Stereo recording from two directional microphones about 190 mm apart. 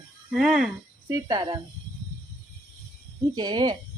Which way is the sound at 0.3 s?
5° right (ahead or behind).